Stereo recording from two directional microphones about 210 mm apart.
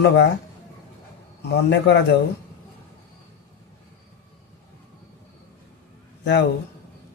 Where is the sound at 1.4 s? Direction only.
50° left (ahead or behind).